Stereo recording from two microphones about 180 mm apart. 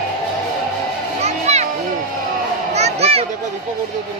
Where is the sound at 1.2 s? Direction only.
35° right (ahead or behind).